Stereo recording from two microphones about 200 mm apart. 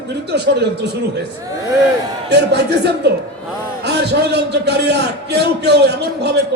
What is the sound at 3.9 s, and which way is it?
A man's voice, 55° right (ahead or behind).